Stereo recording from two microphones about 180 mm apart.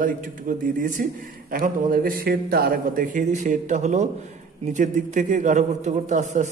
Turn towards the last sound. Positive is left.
turn(degrees=-45)  # may be behind; listen again after turning